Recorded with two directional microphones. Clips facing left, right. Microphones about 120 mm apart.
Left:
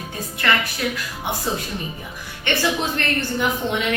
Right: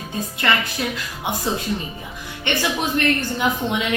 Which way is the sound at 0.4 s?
20° right (ahead or behind).